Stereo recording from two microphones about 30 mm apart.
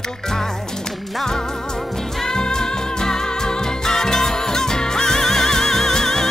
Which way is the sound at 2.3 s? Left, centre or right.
Left.